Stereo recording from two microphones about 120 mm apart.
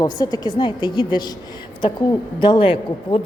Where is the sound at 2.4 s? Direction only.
45° left (ahead or behind).